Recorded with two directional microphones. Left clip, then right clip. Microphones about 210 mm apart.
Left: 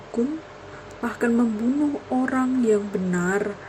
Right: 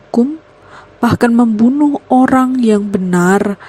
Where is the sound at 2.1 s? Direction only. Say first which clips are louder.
Right 14 dB; 50° right (ahead or behind).